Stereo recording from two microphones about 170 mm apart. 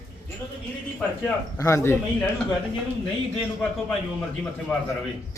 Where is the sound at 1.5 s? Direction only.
15° left (ahead or behind).